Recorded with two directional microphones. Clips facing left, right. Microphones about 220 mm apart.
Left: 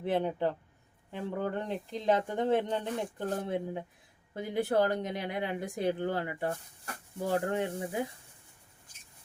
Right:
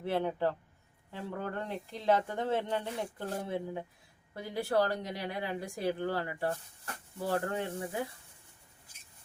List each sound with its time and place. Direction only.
0.0 s speech: 15° left (ahead or behind)